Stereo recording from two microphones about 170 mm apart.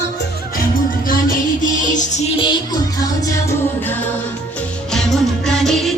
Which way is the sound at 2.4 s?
25° left (ahead or behind).